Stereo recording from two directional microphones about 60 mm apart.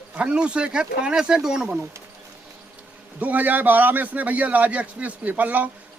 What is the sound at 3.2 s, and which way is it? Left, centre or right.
A man's voice, right.